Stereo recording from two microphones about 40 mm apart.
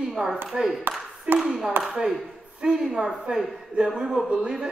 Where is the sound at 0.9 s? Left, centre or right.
Right.